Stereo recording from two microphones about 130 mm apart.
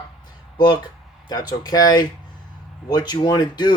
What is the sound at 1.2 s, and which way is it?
Speech, 30° left (ahead or behind).